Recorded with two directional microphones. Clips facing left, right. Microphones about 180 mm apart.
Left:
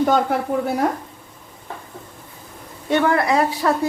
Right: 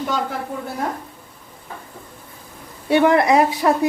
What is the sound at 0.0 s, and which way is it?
Speech, 50° left (ahead or behind).